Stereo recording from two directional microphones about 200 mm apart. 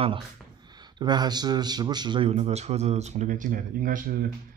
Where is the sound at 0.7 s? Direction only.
20° right (ahead or behind).